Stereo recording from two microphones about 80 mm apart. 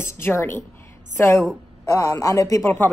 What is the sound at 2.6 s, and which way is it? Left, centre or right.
Speech, left.